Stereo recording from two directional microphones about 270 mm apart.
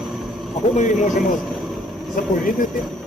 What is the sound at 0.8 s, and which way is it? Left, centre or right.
Speech, left.